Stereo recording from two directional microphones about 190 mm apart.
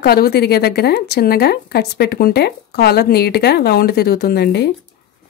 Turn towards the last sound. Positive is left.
turn(degrees=60)  # may be behind; listen again after turning